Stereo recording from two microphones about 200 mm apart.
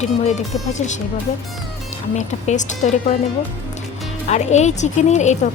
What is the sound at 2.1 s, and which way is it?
Speech, 35° left (ahead or behind).